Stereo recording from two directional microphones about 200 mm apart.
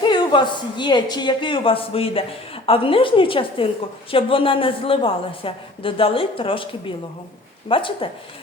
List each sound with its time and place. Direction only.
0.0 s a woman's voice: 25° left (ahead or behind)